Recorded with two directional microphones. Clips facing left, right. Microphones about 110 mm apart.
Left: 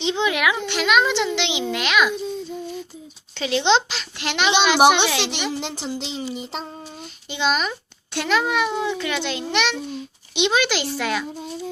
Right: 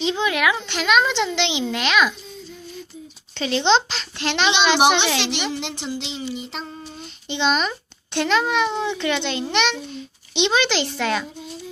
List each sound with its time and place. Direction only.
0.0 s a woman's voice: 20° left (ahead or behind)
3.3 s a child's voice: 10° left (ahead or behind)
5.5 s a sound: 40° left (ahead or behind)
7.3 s a child's voice: 5° left (ahead or behind)